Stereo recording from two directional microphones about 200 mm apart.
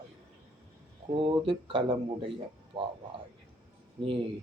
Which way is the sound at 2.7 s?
25° right (ahead or behind).